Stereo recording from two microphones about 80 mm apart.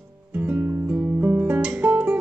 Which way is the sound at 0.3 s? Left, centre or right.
Right.